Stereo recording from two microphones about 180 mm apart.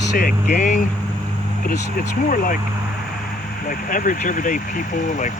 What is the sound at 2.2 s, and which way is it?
Speech, 50° left (ahead or behind).